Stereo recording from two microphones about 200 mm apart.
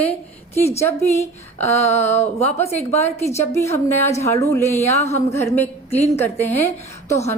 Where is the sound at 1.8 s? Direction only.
30° left (ahead or behind).